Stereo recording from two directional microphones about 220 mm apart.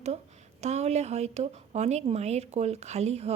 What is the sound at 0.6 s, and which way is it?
Speech, 30° right (ahead or behind).